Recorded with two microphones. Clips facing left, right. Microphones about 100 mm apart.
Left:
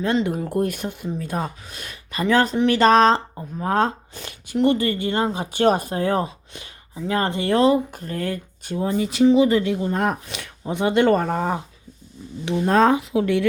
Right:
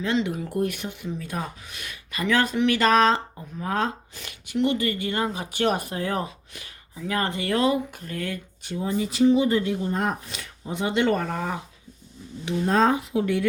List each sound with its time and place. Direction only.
0.0 s speech: 45° left (ahead or behind)
8.8 s speech: 65° left (ahead or behind); by 11.6 s 35° left (ahead or behind)
12.5 s speech: 65° left (ahead or behind); by 13.4 s 85° left